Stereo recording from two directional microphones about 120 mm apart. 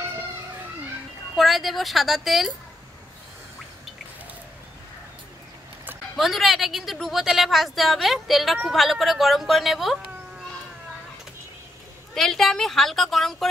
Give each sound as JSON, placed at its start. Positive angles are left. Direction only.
{"t": 1.3, "sound": "a woman's voice", "side_deg": 0}
{"t": 6.1, "sound": "a woman's voice", "side_deg": 0}
{"t": 12.1, "sound": "a woman's voice", "side_deg": 5}